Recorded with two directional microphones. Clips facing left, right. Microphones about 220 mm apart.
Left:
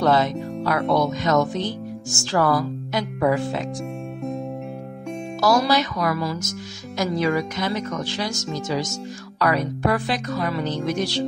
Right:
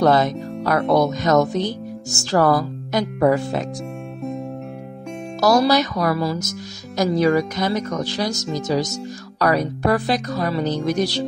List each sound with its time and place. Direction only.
0.0 s speech: 40° right (ahead or behind)
5.4 s speech: 40° right (ahead or behind)